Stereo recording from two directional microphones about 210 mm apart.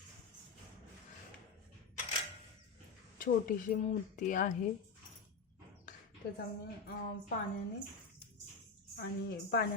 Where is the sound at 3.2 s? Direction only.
40° left (ahead or behind).